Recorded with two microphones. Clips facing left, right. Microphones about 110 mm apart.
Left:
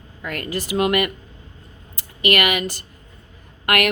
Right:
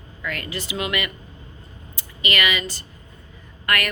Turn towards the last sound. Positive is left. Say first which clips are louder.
# left 5 dB
turn(degrees=65)  # may be behind; listen again after turning